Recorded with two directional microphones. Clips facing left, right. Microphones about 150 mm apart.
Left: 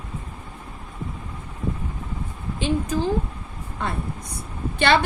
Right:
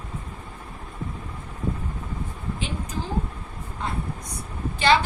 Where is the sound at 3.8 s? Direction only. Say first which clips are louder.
Left 2 dB; 65° left (ahead or behind).